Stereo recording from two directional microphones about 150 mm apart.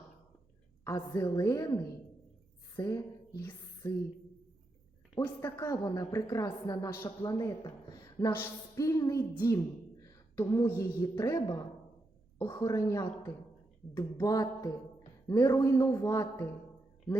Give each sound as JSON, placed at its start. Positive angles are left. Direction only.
{"t": 0.9, "sound": "speech", "side_deg": 20}
{"t": 5.4, "sound": "speech", "side_deg": 20}
{"t": 10.0, "sound": "a sound", "side_deg": 25}
{"t": 10.8, "sound": "speech", "side_deg": 25}